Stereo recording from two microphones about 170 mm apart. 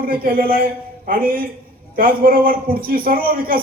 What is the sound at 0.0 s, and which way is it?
A man's voice, 60° right (ahead or behind).